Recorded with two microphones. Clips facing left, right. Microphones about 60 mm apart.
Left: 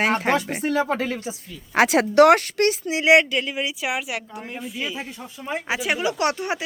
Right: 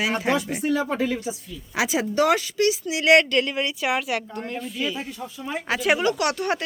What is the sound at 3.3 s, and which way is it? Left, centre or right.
A woman's voice, centre.